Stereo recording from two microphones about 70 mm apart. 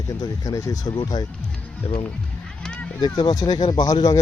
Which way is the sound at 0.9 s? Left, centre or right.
Left.